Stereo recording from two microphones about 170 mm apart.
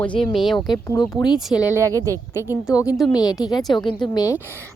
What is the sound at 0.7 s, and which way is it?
Speech, 25° left (ahead or behind).